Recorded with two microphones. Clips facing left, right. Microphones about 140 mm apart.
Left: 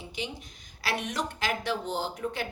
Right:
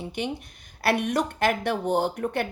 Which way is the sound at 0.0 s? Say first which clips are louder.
Right 7 dB; 60° right (ahead or behind).